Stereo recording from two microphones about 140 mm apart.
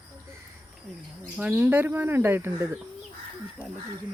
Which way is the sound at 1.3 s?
15° right (ahead or behind).